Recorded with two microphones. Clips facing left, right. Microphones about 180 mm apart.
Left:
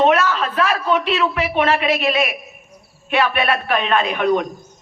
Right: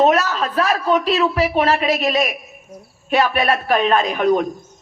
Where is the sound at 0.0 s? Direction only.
40° right (ahead or behind).